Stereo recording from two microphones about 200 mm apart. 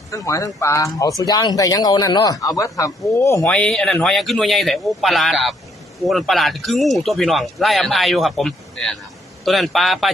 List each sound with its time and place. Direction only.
0.1 s speech: 15° left (ahead or behind)
3.4 s speech: 5° left (ahead or behind)